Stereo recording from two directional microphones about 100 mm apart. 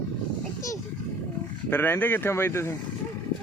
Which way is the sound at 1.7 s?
20° left (ahead or behind).